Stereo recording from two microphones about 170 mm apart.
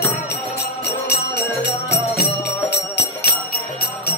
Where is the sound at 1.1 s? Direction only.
75° left (ahead or behind).